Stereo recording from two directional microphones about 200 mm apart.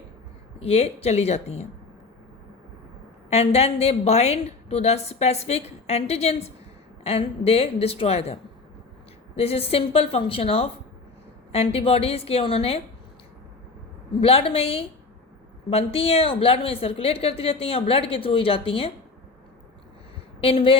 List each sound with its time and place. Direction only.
0.6 s a woman's voice: 30° left (ahead or behind)
3.2 s a woman's voice: 30° left (ahead or behind)
14.2 s a woman's voice: 30° left (ahead or behind)
20.4 s a woman's voice: 30° left (ahead or behind)